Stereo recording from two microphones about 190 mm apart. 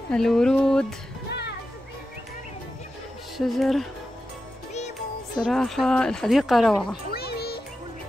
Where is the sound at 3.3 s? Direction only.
Centre (ahead or behind).